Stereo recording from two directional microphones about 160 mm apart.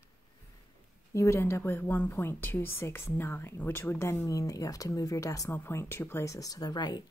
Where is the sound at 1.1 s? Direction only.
20° left (ahead or behind).